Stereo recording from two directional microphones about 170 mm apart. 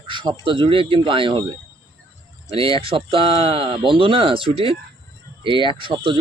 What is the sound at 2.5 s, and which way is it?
Speech, 35° right (ahead or behind).